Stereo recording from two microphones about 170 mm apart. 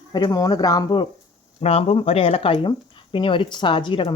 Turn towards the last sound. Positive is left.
turn(degrees=30)  # may be behind; listen again after turning